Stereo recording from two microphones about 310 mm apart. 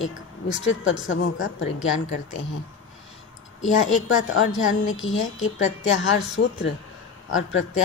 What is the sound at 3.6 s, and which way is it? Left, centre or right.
Speech, left.